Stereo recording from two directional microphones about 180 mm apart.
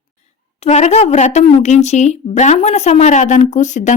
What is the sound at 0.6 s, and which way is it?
Speech, 40° left (ahead or behind).